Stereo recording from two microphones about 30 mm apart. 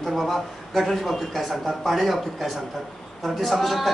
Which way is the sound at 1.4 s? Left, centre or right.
Centre.